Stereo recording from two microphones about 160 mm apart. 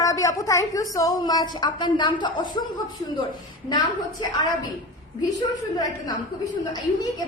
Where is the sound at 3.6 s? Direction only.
25° left (ahead or behind).